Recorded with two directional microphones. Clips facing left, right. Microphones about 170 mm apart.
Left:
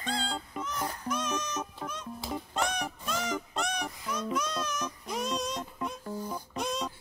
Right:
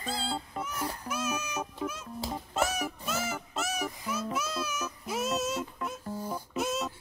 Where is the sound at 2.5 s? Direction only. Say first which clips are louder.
Right 3 dB; 5° right (ahead or behind).